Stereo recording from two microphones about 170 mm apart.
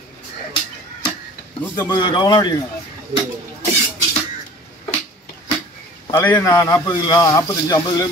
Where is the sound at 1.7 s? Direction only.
25° left (ahead or behind).